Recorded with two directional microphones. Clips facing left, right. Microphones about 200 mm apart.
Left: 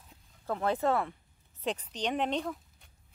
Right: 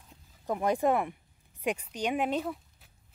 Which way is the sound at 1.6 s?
10° right (ahead or behind).